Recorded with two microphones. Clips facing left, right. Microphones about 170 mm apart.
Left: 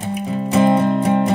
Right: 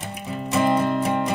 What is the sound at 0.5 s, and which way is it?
Music, 25° left (ahead or behind).